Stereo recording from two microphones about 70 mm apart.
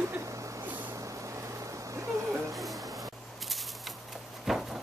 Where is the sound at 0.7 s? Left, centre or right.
Right.